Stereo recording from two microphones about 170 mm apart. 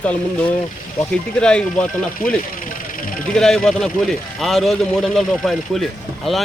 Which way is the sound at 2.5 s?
50° left (ahead or behind).